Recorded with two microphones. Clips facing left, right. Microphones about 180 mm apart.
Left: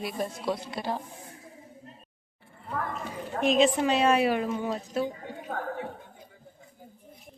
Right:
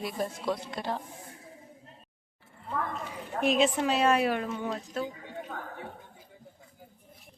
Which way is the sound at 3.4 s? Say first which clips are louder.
Left 3 dB; 5° right (ahead or behind).